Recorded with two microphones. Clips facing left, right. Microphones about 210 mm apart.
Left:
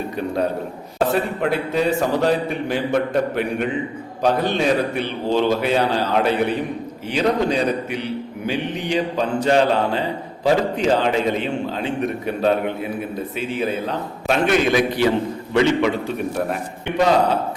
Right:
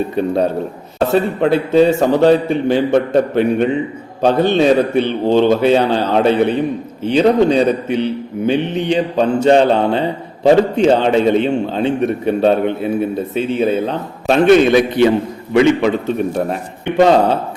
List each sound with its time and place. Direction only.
1.1 s a man's voice: 25° right (ahead or behind)